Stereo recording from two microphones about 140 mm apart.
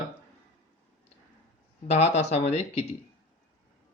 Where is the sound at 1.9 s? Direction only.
50° left (ahead or behind).